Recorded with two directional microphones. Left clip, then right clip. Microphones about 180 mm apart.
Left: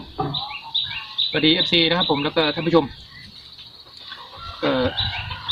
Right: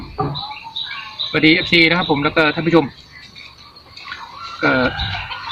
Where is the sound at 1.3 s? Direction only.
15° left (ahead or behind).